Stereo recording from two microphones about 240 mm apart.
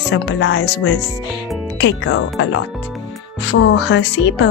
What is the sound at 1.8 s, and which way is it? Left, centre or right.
Speech, left.